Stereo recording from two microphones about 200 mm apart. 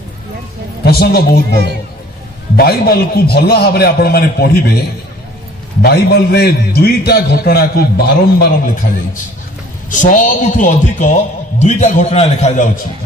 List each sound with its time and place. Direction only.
0.8 s a man's voice: 50° left (ahead or behind)
5.8 s a man's voice: 55° left (ahead or behind)
9.8 s speech: 40° left (ahead or behind)